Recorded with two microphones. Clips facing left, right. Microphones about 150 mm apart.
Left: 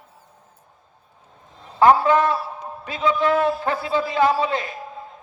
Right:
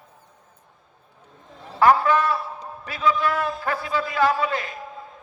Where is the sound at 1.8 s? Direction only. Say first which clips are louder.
Left 3 dB; 25° left (ahead or behind).